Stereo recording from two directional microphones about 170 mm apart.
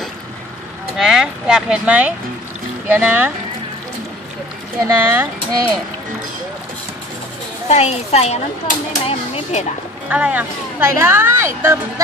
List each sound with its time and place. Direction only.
0.9 s speech: centre (ahead or behind)
4.8 s speech: 15° right (ahead or behind)
7.6 s speech: 40° left (ahead or behind)
10.0 s speech: 5° right (ahead or behind)